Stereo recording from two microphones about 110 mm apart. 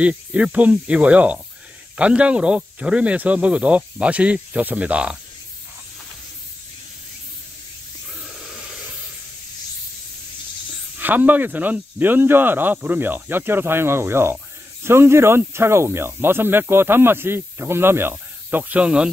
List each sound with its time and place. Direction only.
0.0 s speech: 10° right (ahead or behind)
8.2 s wheeze: 5° right (ahead or behind)
11.0 s speech: 15° right (ahead or behind)